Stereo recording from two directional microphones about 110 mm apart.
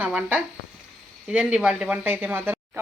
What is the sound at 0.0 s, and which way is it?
Speech, 10° right (ahead or behind).